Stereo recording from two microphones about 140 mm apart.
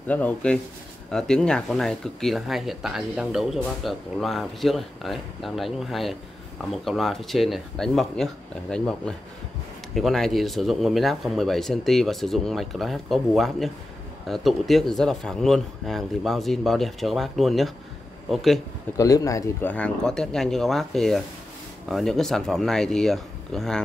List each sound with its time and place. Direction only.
0.1 s speech: 10° left (ahead or behind)
18.9 s speech: 25° left (ahead or behind)
19.7 s speech: 5° left (ahead or behind)